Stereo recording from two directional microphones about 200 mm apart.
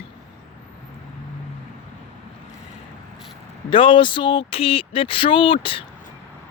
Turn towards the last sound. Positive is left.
turn(degrees=25)  # may be behind; listen again after turning